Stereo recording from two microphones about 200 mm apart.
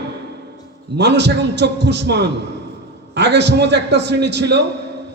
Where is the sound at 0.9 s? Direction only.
60° right (ahead or behind).